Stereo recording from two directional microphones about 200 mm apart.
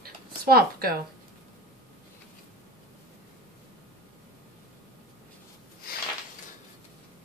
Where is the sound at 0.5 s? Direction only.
50° right (ahead or behind).